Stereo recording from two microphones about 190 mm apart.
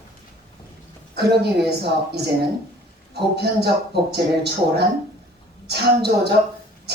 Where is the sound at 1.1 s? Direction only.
60° right (ahead or behind).